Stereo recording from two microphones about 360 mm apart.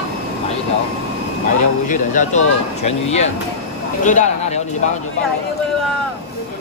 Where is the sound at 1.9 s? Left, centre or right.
Centre.